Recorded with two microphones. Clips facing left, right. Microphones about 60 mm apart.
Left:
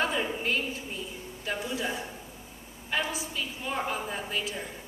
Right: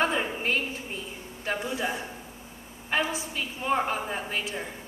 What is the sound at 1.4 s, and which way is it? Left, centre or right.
A woman's voice, right.